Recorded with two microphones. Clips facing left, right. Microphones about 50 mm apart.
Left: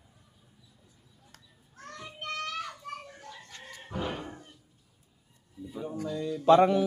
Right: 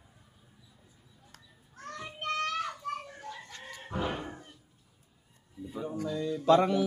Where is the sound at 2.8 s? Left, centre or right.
Centre.